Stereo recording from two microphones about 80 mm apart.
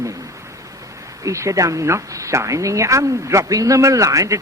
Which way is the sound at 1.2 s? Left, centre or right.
Right.